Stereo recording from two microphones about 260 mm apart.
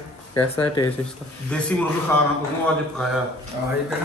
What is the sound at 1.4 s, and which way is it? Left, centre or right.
Speech, centre.